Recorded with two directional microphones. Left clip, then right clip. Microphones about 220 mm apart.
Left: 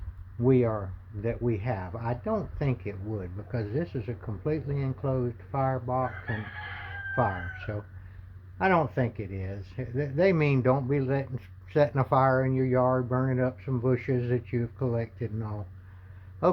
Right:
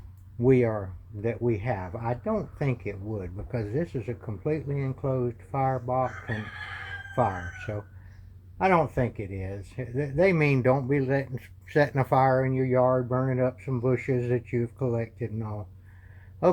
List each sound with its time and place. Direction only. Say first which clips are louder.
0.4 s speech: right 2 dB; 15° right (ahead or behind)